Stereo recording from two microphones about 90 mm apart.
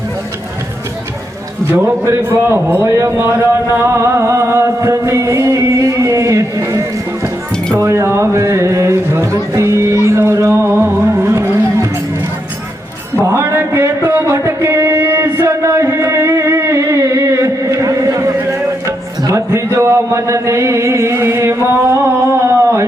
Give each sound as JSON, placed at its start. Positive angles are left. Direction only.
{"t": 1.7, "sound": "a man's voice", "side_deg": -30}
{"t": 3.8, "sound": "music", "side_deg": -35}
{"t": 13.2, "sound": "a sound", "side_deg": -30}